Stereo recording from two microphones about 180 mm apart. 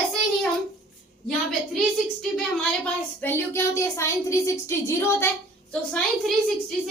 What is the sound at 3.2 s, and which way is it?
A woman's voice, 15° left (ahead or behind).